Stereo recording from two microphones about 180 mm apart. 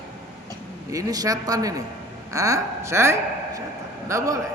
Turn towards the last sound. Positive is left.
turn(degrees=-15)  # may be behind; listen again after turning